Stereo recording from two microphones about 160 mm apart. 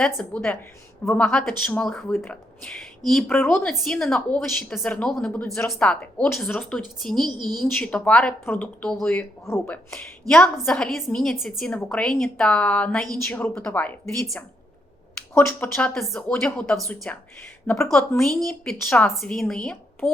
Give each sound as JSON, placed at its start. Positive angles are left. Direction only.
{"t": 0.0, "sound": "a woman's voice", "side_deg": 5}
{"t": 7.3, "sound": "a woman's voice", "side_deg": -25}
{"t": 7.6, "sound": "a woman's voice", "side_deg": 5}
{"t": 15.4, "sound": "speech", "side_deg": 15}
{"t": 18.2, "sound": "a woman's voice", "side_deg": 5}